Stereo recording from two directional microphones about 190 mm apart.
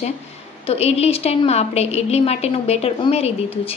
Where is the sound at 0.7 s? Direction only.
35° left (ahead or behind).